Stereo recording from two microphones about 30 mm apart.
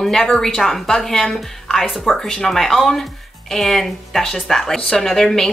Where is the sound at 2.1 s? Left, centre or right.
Centre.